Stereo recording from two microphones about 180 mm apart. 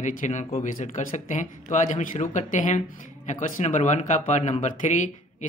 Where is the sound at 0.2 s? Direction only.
40° left (ahead or behind).